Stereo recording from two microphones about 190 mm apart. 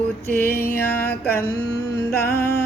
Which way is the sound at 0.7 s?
10° left (ahead or behind).